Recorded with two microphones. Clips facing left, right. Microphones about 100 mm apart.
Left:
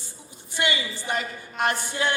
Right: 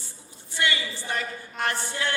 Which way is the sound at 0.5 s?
20° left (ahead or behind).